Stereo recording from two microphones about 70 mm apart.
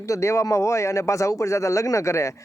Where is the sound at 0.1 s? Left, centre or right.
Left.